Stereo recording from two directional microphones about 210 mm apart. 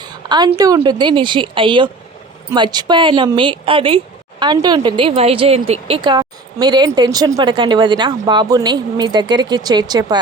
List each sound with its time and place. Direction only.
0.0 s speech: 20° right (ahead or behind)